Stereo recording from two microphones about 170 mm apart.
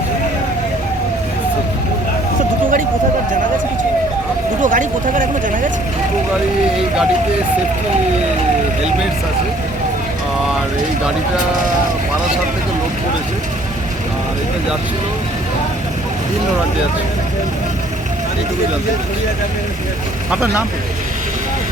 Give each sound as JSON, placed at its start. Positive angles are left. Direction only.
{"t": 4.6, "sound": "speech", "side_deg": -50}
{"t": 20.3, "sound": "speech", "side_deg": -5}